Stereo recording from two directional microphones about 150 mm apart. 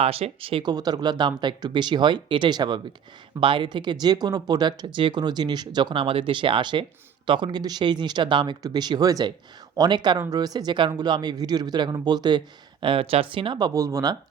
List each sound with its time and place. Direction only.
0.0 s speech: 40° right (ahead or behind); by 14.2 s 25° right (ahead or behind)